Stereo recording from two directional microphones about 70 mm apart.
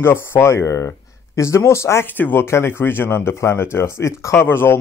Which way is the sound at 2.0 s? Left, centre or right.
Left.